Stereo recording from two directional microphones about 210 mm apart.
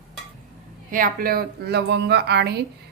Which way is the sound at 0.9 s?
40° right (ahead or behind).